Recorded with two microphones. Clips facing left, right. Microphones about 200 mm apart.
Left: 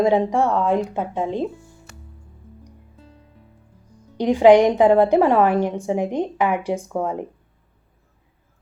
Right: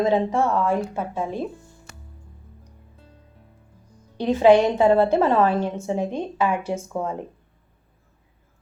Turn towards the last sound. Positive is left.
turn(degrees=15)  # may be behind; listen again after turning